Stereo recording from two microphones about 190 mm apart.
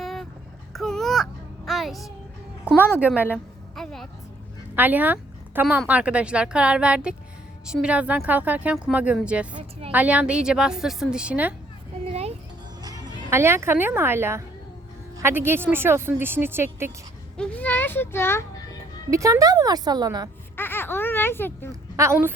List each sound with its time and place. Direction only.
0.0 s child singing: centre (ahead or behind)
0.7 s a sound: centre (ahead or behind)
3.2 s speech: 10° right (ahead or behind)
3.8 s music: centre (ahead or behind)
4.7 s a woman's voice: 10° right (ahead or behind)
13.3 s speech: 15° right (ahead or behind)
17.3 s a child's voice: 5° left (ahead or behind)
19.1 s speech: 15° right (ahead or behind)
20.6 s a sound: 10° left (ahead or behind)
21.9 s speech: 15° right (ahead or behind)